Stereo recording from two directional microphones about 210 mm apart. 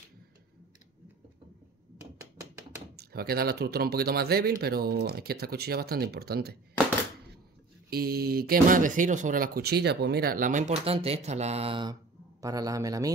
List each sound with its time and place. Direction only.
3.0 s speech: 45° right (ahead or behind)
7.9 s speech: 45° right (ahead or behind); by 13.1 s 15° right (ahead or behind)